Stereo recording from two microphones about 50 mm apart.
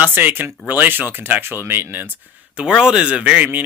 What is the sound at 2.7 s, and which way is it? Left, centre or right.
Speech, centre.